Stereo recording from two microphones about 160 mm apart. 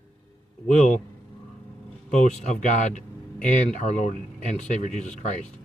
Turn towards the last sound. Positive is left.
turn(degrees=50)  # may be behind; listen again after turning